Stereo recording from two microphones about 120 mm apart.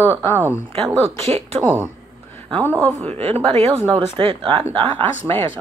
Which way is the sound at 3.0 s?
55° right (ahead or behind).